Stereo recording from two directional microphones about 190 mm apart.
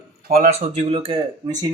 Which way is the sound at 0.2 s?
50° right (ahead or behind).